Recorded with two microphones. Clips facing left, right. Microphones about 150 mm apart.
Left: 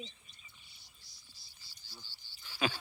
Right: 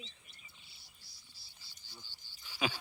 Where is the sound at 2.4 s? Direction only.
10° right (ahead or behind).